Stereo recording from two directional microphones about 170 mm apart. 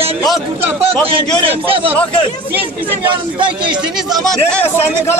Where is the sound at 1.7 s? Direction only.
30° right (ahead or behind).